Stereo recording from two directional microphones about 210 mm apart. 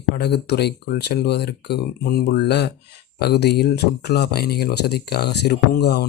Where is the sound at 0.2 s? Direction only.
50° left (ahead or behind).